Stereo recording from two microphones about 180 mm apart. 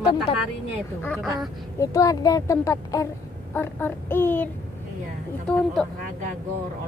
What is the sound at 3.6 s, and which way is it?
Child singing, 10° left (ahead or behind).